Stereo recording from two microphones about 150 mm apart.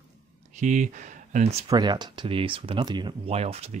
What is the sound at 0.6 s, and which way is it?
Speech, 55° right (ahead or behind).